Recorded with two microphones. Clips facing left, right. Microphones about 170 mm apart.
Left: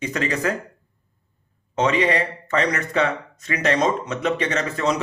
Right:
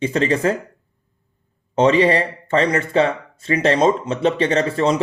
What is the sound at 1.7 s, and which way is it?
Speech, 30° right (ahead or behind).